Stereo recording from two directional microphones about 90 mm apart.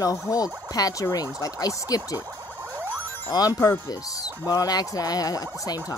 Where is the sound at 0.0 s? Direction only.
40° left (ahead or behind).